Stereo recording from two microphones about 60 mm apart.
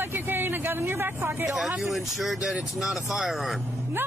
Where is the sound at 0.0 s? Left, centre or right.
Right.